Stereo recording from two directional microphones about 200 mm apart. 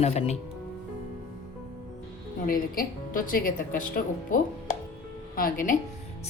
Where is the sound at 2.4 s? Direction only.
45° left (ahead or behind).